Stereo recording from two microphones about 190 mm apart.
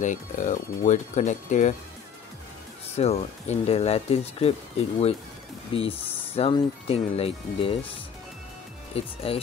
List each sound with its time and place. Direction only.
0.0 s speech: 40° left (ahead or behind)
3.0 s speech: 35° left (ahead or behind)
8.9 s speech: 30° left (ahead or behind)